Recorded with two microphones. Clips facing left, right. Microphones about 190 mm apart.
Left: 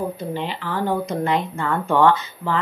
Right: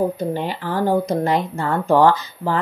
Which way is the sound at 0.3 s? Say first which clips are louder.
Right 3 dB; 45° right (ahead or behind).